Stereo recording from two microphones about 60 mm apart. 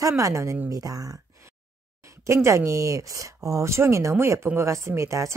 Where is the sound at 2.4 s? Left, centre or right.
Right.